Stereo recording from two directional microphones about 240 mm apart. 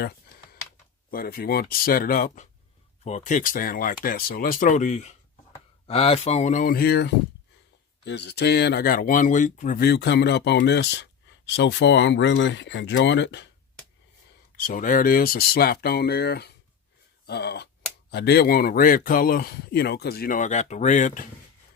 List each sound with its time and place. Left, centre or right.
1.1 s speech: left
14.5 s speech: left